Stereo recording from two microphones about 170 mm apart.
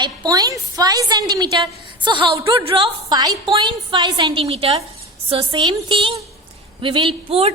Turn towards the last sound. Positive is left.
turn(degrees=-35)  # may be behind; listen again after turning